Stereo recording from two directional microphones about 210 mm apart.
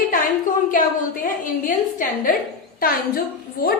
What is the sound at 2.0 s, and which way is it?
A woman's voice, 40° left (ahead or behind).